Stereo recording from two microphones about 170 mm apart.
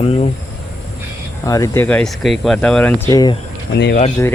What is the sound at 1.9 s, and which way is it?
Speech, 5° left (ahead or behind).